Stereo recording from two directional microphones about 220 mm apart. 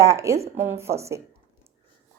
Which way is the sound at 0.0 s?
15° right (ahead or behind).